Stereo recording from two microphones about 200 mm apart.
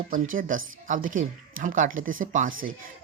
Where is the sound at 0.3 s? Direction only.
40° right (ahead or behind).